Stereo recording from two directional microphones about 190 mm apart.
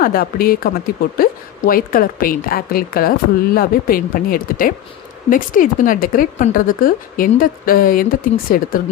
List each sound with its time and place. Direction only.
0.0 s speech: 50° left (ahead or behind)